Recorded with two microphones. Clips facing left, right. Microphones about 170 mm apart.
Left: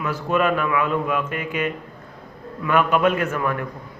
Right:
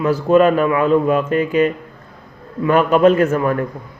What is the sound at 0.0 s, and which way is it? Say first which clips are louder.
A man's voice: right 9 dB; 35° right (ahead or behind).